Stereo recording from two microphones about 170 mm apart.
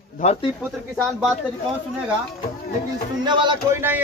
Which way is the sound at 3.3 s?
30° right (ahead or behind).